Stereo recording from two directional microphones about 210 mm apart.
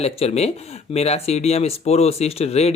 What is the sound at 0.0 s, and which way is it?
Speech, 30° left (ahead or behind).